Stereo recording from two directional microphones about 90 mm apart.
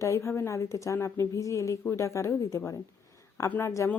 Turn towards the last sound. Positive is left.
turn(degrees=30)  # may be behind; listen again after turning